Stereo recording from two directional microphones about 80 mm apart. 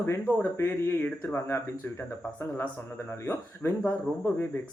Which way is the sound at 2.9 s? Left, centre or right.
Left.